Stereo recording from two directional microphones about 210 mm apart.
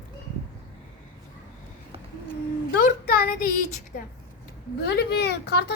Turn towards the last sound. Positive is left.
turn(degrees=55)  # may be behind; listen again after turning